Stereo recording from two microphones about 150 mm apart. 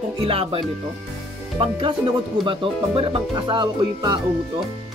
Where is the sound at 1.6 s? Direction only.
40° right (ahead or behind).